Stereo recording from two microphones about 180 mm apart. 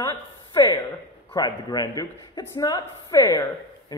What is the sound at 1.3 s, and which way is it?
Speech, 20° left (ahead or behind).